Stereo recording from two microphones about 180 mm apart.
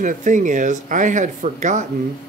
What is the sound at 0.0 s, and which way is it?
Speech, 45° right (ahead or behind).